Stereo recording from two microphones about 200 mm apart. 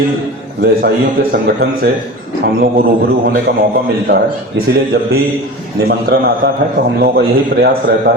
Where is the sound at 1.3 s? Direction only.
50° right (ahead or behind).